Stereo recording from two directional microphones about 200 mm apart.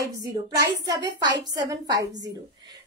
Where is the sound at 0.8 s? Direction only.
20° right (ahead or behind).